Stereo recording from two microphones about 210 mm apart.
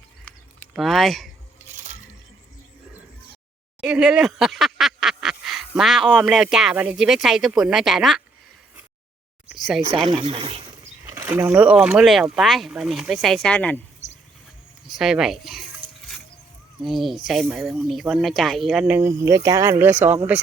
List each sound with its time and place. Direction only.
0.3 s a sound: 5° left (ahead or behind)
1.6 s music: 10° right (ahead or behind)
3.8 s speech: 5° right (ahead or behind)
9.5 s speech: centre (ahead or behind)
10.1 s speech: 25° right (ahead or behind)
11.0 s speech: 10° right (ahead or behind); by 13.8 s 5° left (ahead or behind)
14.8 s speech: centre (ahead or behind)
16.8 s speech: centre (ahead or behind)